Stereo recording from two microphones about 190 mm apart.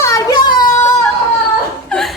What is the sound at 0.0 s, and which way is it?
Child singing, 15° left (ahead or behind).